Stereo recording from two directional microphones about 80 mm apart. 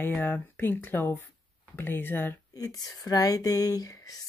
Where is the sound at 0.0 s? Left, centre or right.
Left.